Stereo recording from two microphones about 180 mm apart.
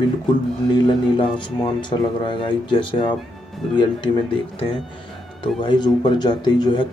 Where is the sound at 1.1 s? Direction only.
25° left (ahead or behind).